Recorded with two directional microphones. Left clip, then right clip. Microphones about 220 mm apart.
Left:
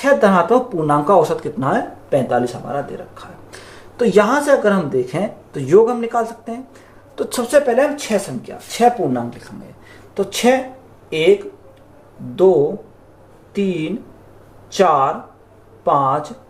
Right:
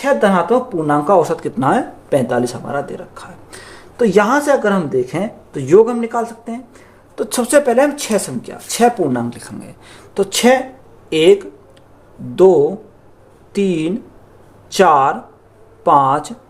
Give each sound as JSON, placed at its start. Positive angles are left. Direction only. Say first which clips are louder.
{"t": 0.0, "sound": "speech", "louder": "left 1 dB", "side_deg": -15}
{"t": 1.5, "sound": "speech", "louder": "right 3 dB", "side_deg": -40}
{"t": 3.5, "sound": "speech", "louder": "right 2 dB", "side_deg": -30}
{"t": 13.5, "sound": "speech", "louder": "right 4 dB", "side_deg": -50}